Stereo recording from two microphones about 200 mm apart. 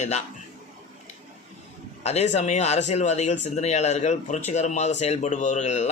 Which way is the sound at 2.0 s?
35° left (ahead or behind).